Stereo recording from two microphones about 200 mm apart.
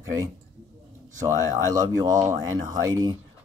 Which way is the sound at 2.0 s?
20° right (ahead or behind).